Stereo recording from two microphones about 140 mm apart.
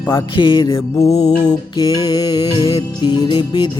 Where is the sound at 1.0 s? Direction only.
50° left (ahead or behind).